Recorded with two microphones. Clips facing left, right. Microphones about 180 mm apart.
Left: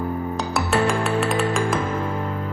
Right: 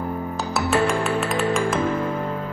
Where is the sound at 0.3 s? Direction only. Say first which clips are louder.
Right 1 dB; centre (ahead or behind).